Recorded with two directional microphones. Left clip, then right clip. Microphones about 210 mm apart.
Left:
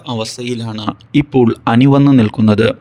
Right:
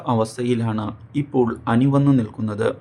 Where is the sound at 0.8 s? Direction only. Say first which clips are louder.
Left 11 dB; 40° left (ahead or behind).